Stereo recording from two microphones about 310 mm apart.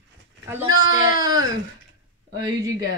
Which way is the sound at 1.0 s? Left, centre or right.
Centre.